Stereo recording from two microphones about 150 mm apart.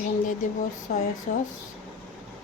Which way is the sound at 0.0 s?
60° left (ahead or behind).